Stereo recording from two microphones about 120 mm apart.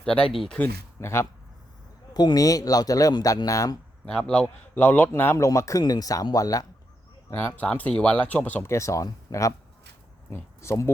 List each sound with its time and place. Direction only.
0.0 s speech: 5° left (ahead or behind)
0.9 s speech: 20° left (ahead or behind)
2.1 s speech: 35° left (ahead or behind)
4.0 s speech: 10° left (ahead or behind); by 6.7 s 30° left (ahead or behind)
7.3 s speech: 15° left (ahead or behind)